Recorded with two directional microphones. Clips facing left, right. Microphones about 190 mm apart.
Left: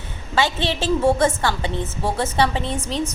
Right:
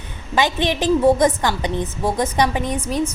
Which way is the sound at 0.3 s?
15° right (ahead or behind).